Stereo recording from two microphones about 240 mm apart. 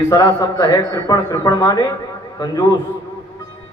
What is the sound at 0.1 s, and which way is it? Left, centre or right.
A man's voice, centre.